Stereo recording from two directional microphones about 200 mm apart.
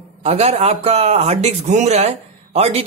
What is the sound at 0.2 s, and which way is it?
Speech, 30° right (ahead or behind).